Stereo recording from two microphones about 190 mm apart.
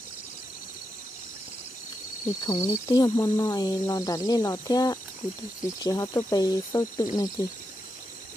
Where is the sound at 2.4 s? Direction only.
25° left (ahead or behind).